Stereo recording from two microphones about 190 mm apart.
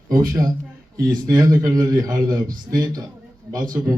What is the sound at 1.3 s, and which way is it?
Speech, 20° right (ahead or behind).